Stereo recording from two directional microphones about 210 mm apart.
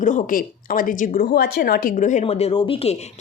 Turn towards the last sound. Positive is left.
turn(degrees=30)  # may be behind; listen again after turning